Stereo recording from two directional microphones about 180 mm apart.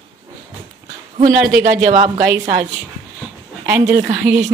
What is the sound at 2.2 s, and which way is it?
Speech, 15° right (ahead or behind).